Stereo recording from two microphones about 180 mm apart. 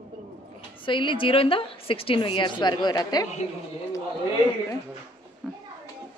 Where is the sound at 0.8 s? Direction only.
25° left (ahead or behind).